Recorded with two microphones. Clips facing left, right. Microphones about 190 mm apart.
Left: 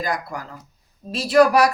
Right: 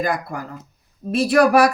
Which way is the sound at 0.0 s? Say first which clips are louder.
Right 3 dB; 55° right (ahead or behind).